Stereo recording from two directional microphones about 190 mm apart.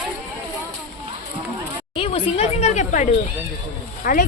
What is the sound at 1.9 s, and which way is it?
A woman's voice, 30° left (ahead or behind).